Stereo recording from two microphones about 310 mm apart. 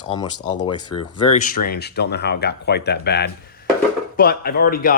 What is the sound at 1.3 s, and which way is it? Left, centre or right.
Speech, left.